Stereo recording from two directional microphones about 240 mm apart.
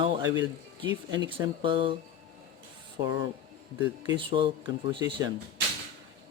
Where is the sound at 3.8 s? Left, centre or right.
Centre.